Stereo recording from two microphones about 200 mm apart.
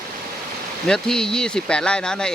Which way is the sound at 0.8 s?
5° left (ahead or behind).